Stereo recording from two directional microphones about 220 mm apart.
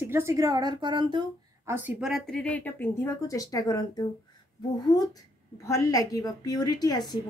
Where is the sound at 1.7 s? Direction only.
5° right (ahead or behind).